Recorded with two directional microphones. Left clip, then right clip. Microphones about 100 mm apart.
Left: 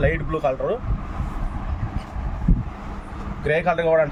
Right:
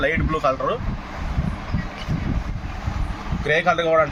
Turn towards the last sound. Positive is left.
turn(degrees=0)  # may be behind; listen again after turning